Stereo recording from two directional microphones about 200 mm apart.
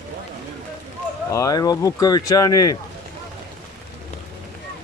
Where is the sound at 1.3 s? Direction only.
15° left (ahead or behind).